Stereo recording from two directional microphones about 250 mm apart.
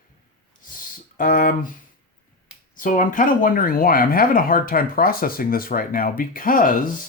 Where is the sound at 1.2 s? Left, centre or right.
Left.